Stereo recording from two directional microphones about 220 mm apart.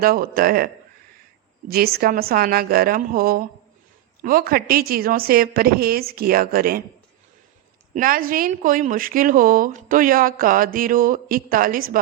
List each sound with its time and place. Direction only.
0.0 s a woman's voice: 40° right (ahead or behind)
7.9 s a woman's voice: 40° right (ahead or behind)